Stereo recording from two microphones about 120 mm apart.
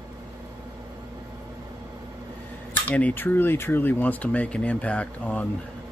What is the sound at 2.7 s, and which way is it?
Speech, 10° left (ahead or behind).